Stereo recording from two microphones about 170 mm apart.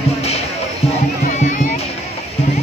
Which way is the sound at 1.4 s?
45° left (ahead or behind).